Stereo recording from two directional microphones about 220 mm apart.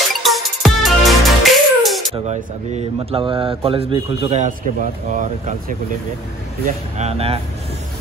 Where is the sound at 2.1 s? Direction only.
30° right (ahead or behind).